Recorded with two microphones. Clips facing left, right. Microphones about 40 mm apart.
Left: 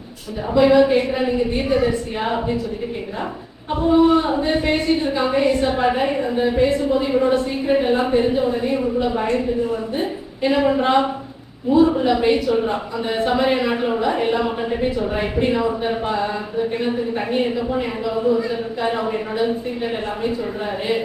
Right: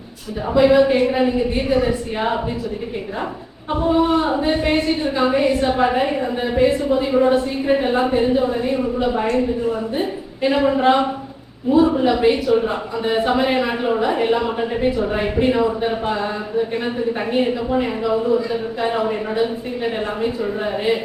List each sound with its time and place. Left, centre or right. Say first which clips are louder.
0.5 s a woman's voice: even; centre
3.8 s a woman's voice: left 2 dB; centre